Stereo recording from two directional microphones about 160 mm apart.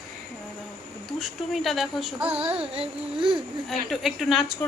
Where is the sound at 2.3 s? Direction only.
40° right (ahead or behind).